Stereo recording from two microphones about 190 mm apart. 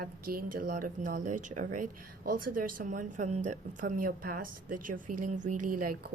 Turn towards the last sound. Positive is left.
turn(degrees=-50)  # may be behind; listen again after turning